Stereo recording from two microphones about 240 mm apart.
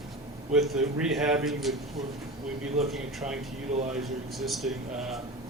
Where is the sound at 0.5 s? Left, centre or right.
Centre.